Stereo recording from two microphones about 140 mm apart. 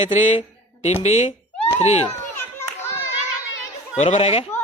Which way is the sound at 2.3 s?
15° left (ahead or behind).